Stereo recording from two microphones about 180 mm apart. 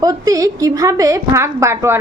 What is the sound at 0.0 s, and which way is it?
A woman's voice, 20° right (ahead or behind).